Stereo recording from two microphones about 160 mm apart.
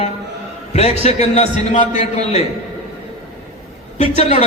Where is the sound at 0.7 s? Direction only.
40° left (ahead or behind).